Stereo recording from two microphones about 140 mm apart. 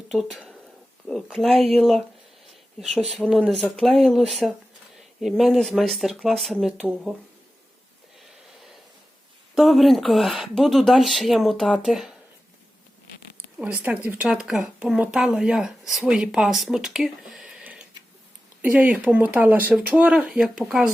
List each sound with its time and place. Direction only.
0.1 s speech: centre (ahead or behind)
3.1 s speech: 5° right (ahead or behind)
8.2 s a sound: centre (ahead or behind)
9.6 s speech: centre (ahead or behind)
13.6 s speech: 10° right (ahead or behind)